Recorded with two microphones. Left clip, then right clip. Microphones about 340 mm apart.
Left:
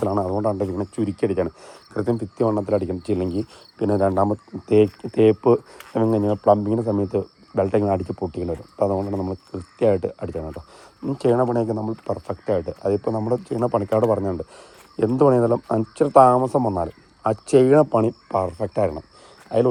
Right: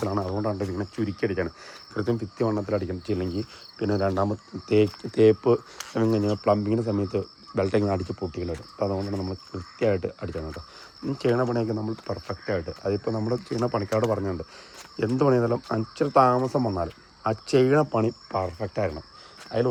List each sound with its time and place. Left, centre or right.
0.0 s speech: centre